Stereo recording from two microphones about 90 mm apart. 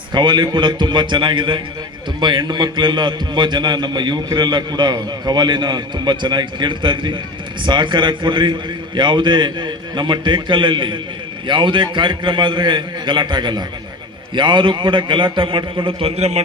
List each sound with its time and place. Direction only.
0.1 s a man's voice: 55° right (ahead or behind); by 16.1 s 80° right